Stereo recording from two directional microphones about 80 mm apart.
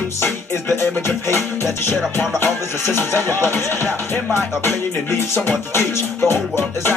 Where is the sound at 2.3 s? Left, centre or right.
Left.